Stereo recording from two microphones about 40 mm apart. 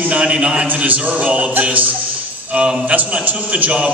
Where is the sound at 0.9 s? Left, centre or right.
Right.